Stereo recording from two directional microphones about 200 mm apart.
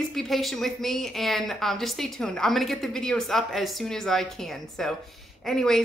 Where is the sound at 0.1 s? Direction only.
Centre (ahead or behind).